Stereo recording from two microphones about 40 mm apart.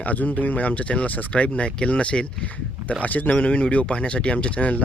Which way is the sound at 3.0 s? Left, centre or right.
Left.